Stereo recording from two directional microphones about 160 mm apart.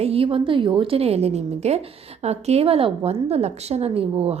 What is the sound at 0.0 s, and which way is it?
A woman's voice, 35° right (ahead or behind).